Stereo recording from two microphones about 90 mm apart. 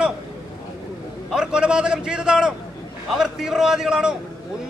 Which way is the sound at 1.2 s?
10° right (ahead or behind).